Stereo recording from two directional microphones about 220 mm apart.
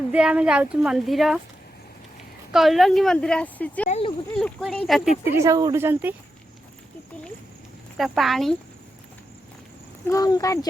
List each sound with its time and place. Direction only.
0.1 s speech: 5° right (ahead or behind)
2.5 s speech: centre (ahead or behind)
3.8 s a sound: 30° left (ahead or behind)
4.4 s speech: centre (ahead or behind)
5.2 s speech: 15° right (ahead or behind)
7.9 s speech: centre (ahead or behind)
10.1 s speech: 15° left (ahead or behind)